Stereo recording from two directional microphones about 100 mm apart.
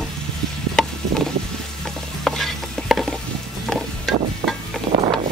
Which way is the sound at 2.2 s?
Centre (ahead or behind).